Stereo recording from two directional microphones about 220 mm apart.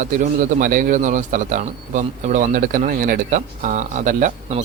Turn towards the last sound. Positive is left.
turn(degrees=-35)  # may be behind; listen again after turning